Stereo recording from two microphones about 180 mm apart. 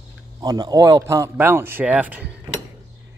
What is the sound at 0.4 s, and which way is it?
A man's voice, 20° right (ahead or behind).